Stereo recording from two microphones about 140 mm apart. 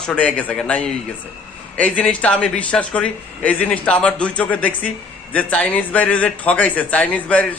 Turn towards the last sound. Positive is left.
turn(degrees=10)  # may be behind; listen again after turning